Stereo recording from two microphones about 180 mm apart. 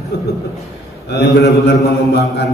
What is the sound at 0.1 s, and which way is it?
A man's voice, 70° left (ahead or behind).